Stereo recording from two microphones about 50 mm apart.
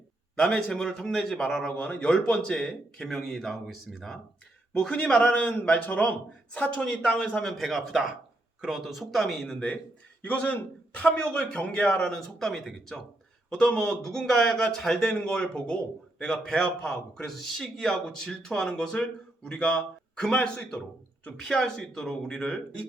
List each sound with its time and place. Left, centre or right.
0.3 s a man's voice: centre
1.6 s a man's voice: left
2.6 s a man's voice: centre
4.9 s a man's voice: left
7.2 s a man's voice: centre
7.5 s speech: centre
10.2 s a man's voice: left
12.5 s a man's voice: centre
15.3 s a man's voice: centre